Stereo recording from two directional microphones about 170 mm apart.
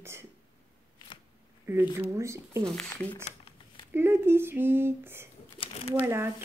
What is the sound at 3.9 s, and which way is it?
Speech, 15° right (ahead or behind).